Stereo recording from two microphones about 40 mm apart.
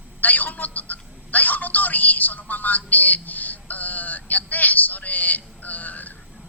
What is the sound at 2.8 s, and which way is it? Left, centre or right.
Synthetic singing, left.